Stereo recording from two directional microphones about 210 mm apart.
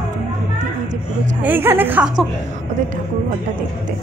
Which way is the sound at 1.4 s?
10° right (ahead or behind).